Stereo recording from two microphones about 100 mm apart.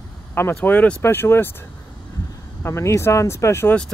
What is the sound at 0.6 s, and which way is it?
Speech, 15° left (ahead or behind).